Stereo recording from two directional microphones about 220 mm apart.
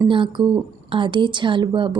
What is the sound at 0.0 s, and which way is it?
Speech, 20° right (ahead or behind).